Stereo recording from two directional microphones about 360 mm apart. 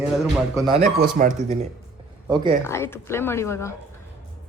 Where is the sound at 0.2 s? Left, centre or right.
Centre.